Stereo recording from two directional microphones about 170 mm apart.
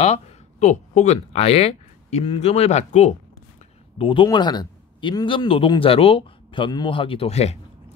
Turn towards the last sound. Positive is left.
turn(degrees=40)  # may be behind; listen again after turning